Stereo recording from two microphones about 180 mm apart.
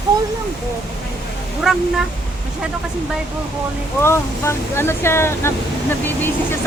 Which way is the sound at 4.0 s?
15° left (ahead or behind).